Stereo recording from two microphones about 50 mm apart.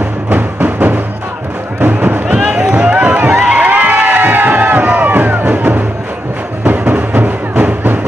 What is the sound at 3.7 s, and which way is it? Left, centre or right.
Music, right.